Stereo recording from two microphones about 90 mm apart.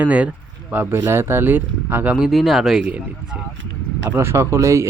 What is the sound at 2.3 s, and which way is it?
Speech, centre (ahead or behind).